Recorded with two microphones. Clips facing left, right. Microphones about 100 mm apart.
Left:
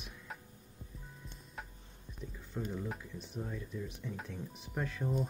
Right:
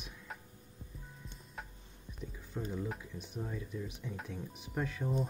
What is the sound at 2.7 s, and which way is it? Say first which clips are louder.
Speech: right 1 dB; centre (ahead or behind).